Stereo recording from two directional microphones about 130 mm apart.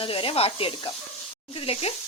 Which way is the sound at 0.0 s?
45° left (ahead or behind).